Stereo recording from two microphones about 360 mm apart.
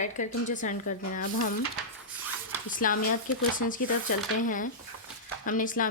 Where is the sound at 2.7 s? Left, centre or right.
Left.